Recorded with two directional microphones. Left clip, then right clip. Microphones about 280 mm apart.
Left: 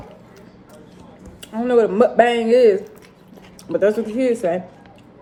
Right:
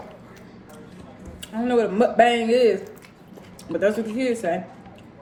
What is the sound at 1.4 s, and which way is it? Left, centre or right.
Speech, left.